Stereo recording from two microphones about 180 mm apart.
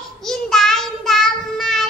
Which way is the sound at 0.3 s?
Centre (ahead or behind).